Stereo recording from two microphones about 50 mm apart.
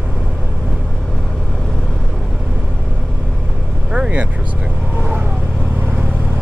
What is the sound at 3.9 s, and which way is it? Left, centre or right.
Speech, right.